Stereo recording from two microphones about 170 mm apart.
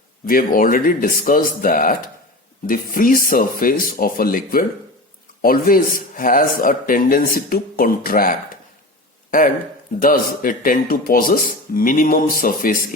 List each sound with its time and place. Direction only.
0.3 s speech: 55° left (ahead or behind)
10.0 s speech: 55° left (ahead or behind)